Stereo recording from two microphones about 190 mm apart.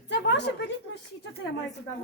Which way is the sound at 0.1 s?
65° left (ahead or behind).